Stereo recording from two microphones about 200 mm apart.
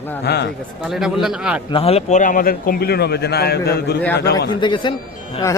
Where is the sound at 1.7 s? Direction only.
30° left (ahead or behind); by 3.9 s 55° left (ahead or behind).